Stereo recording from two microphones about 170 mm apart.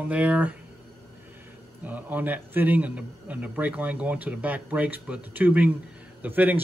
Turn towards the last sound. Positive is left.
turn(degrees=-10)  # may be behind; listen again after turning